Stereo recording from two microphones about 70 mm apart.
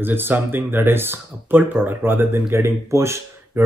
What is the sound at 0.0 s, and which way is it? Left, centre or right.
Speech, right.